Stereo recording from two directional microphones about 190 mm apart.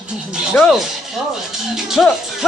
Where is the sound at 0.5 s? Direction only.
Centre (ahead or behind).